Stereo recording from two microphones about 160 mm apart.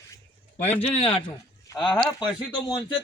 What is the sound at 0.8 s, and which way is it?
A man's voice, 35° left (ahead or behind).